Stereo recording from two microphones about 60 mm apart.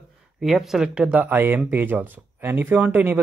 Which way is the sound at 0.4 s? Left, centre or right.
Centre.